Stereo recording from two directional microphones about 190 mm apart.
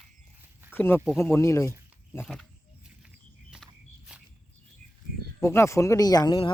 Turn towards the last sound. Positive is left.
turn(degrees=25)  # may be behind; listen again after turning